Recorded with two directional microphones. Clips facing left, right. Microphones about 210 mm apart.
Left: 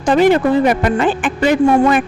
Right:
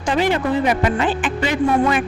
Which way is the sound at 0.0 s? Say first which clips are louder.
Left 7 dB; 50° left (ahead or behind).